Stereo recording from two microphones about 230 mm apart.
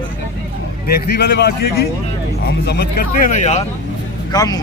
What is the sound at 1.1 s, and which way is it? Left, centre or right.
Speech, left.